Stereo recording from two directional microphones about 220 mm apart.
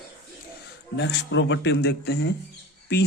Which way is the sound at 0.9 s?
55° left (ahead or behind).